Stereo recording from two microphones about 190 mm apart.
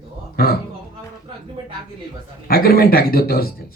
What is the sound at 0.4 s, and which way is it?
Speech, 55° left (ahead or behind).